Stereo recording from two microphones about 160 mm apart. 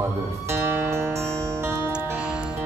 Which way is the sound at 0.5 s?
15° right (ahead or behind).